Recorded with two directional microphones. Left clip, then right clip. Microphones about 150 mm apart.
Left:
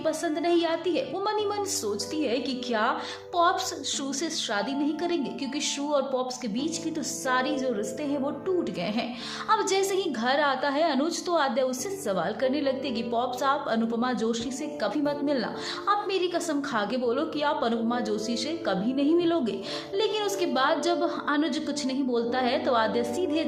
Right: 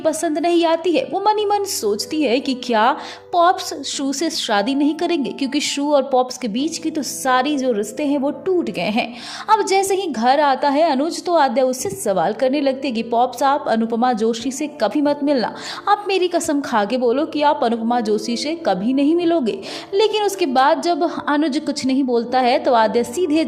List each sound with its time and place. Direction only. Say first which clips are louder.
0.0 s a woman's voice: right 9 dB; 50° right (ahead or behind)
9.5 s a woman's voice: right 9 dB; 40° right (ahead or behind)